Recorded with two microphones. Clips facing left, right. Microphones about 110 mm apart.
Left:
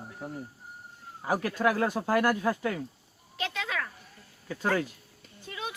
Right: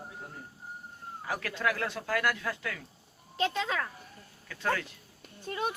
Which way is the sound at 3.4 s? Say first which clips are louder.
Right 3 dB; 30° right (ahead or behind).